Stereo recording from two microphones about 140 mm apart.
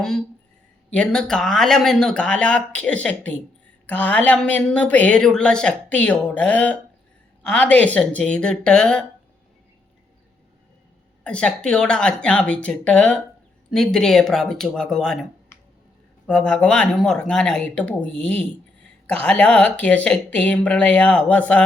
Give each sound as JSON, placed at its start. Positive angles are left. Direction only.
{"t": 0.0, "sound": "a woman's voice", "side_deg": 5}
{"t": 11.2, "sound": "a woman's voice", "side_deg": 10}
{"t": 15.5, "sound": "finger snapping", "side_deg": 20}
{"t": 16.2, "sound": "a woman's voice", "side_deg": 5}